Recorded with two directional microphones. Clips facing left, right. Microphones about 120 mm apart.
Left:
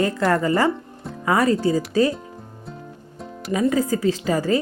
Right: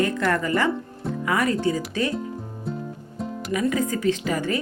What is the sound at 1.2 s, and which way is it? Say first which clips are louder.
Speech: left 4 dB; 35° left (ahead or behind).